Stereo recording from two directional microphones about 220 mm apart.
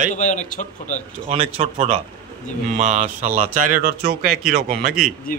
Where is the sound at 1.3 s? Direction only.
25° right (ahead or behind).